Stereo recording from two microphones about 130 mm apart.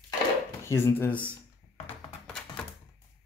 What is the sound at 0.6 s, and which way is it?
Speech, 20° left (ahead or behind).